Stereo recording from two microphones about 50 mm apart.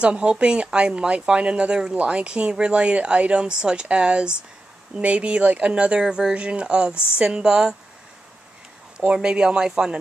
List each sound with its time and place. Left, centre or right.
0.0 s speech: right
8.9 s speech: right